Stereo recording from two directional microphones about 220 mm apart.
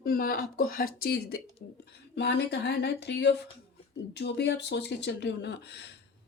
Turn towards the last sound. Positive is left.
turn(degrees=50)  # may be behind; listen again after turning